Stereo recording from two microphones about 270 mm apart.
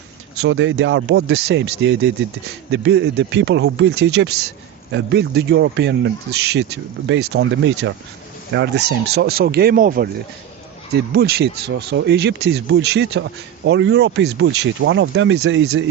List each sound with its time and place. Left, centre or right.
0.4 s speech: right